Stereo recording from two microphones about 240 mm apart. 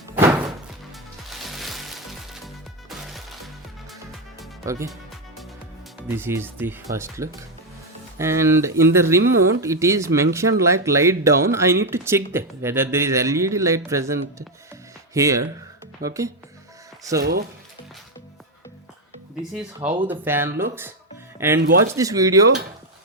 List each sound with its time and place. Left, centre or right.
0.2 s music: centre
4.6 s speech: centre
6.1 s speech: centre
20.1 s speech: centre
21.6 s speech: right
21.9 s speech: centre